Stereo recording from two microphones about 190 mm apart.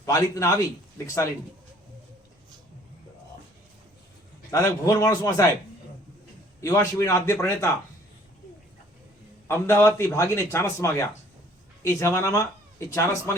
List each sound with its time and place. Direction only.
0.0 s a man's voice: 15° left (ahead or behind)
4.5 s a man's voice: 15° left (ahead or behind)
6.6 s a man's voice: 15° left (ahead or behind)
9.5 s a man's voice: 15° left (ahead or behind)